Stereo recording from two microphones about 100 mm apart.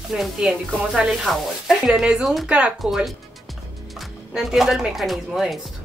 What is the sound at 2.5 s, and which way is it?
Speech, 10° right (ahead or behind).